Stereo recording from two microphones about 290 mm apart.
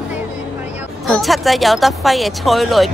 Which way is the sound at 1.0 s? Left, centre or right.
Centre.